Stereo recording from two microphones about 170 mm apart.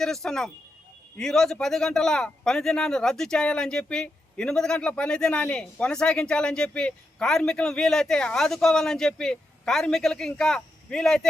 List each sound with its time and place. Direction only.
0.0 s speech: 5° left (ahead or behind)